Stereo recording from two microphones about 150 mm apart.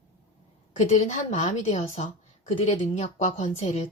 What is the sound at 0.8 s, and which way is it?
A woman's voice, 50° left (ahead or behind).